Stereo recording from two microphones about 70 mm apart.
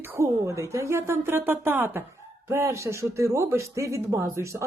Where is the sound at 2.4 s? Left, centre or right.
Right.